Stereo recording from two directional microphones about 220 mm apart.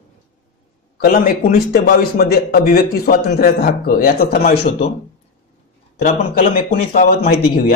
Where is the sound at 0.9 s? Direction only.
40° left (ahead or behind).